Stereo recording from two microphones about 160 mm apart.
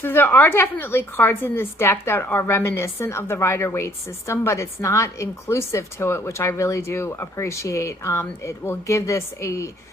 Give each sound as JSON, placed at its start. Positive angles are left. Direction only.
{"t": 0.0, "sound": "a woman's voice", "side_deg": 15}